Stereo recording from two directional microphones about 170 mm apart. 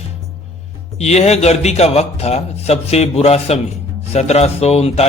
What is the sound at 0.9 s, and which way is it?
A man's voice, 40° left (ahead or behind).